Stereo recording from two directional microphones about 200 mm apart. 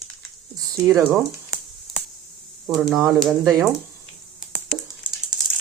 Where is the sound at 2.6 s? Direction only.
Centre (ahead or behind).